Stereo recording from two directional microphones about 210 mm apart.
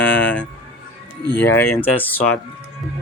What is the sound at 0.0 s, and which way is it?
Music, 10° left (ahead or behind).